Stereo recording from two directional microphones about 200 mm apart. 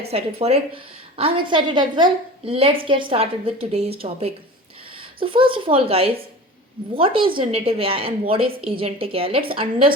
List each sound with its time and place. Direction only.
0.1 s a woman's voice: 30° right (ahead or behind)